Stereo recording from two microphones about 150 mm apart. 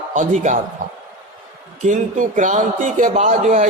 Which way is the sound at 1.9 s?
55° right (ahead or behind).